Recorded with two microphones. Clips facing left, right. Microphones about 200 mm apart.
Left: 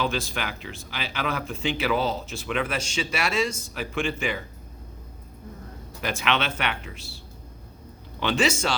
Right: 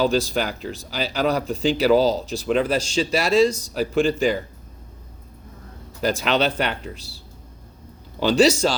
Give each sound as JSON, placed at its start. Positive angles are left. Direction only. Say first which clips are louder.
{"t": 0.0, "sound": "speech", "louder": "right 8 dB", "side_deg": -35}
{"t": 6.0, "sound": "speech", "louder": "right 6 dB", "side_deg": -35}
{"t": 8.2, "sound": "speech", "louder": "right 8 dB", "side_deg": -35}